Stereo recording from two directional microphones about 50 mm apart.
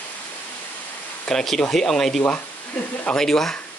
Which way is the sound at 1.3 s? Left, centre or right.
Centre.